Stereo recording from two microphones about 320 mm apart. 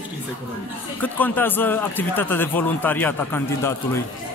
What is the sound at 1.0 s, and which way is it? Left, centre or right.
Speech, centre.